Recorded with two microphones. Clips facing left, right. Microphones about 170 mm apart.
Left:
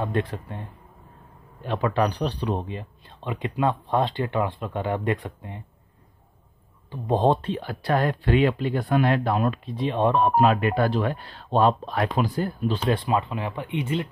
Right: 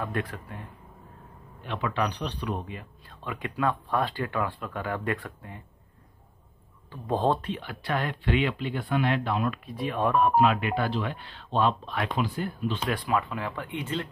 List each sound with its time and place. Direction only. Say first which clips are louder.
0.0 s speech: left 5 dB; 25° left (ahead or behind)
1.6 s speech: left 6 dB; 40° left (ahead or behind); by 5.6 s 20° left (ahead or behind)
6.9 s speech: left 4 dB; 20° left (ahead or behind)
7.4 s speech: left 6 dB; 35° left (ahead or behind)
9.7 s speech: left 4 dB; 25° left (ahead or behind)
10.3 s speech: left 3 dB; 45° left (ahead or behind); by 14.0 s 20° left (ahead or behind)